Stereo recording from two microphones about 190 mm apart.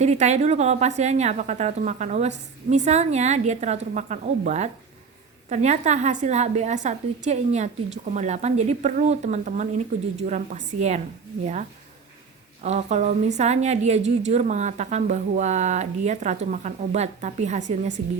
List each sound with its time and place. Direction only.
0.0 s a woman's voice: 35° right (ahead or behind)
12.6 s a woman's voice: 35° right (ahead or behind)